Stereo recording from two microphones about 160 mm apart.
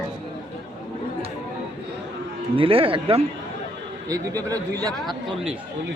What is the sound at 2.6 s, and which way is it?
Speech, 35° right (ahead or behind).